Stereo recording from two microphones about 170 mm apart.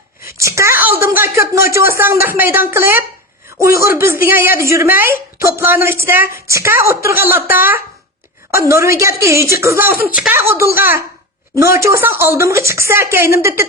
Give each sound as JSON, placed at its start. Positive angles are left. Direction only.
{"t": 0.3, "sound": "speech", "side_deg": -15}
{"t": 9.9, "sound": "speech", "side_deg": 60}
{"t": 10.2, "sound": "speech", "side_deg": -10}